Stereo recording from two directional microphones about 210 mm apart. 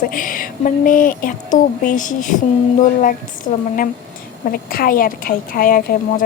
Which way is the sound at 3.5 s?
35° left (ahead or behind).